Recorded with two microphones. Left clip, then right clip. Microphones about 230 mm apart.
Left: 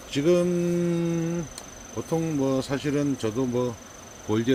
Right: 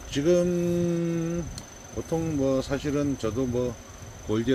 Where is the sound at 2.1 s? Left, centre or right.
Centre.